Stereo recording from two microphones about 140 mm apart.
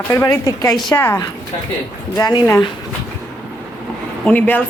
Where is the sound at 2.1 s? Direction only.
30° left (ahead or behind).